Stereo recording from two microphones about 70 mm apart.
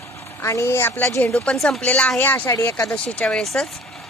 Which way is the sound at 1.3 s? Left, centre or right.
Centre.